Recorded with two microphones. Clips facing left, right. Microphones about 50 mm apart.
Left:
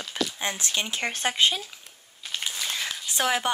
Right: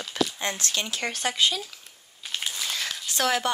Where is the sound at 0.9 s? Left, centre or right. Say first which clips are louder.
Left 1 dB; left.